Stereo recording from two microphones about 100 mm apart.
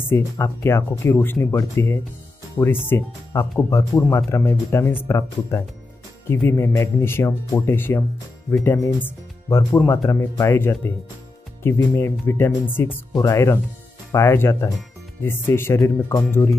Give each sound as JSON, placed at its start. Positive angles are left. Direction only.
{"t": 0.0, "sound": "speech", "side_deg": 25}